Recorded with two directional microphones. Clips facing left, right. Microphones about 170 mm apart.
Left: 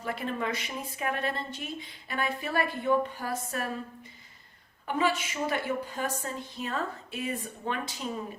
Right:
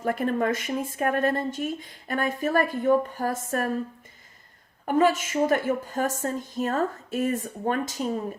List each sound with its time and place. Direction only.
0.0 s a woman's voice: 45° right (ahead or behind)
4.9 s a woman's voice: 45° right (ahead or behind)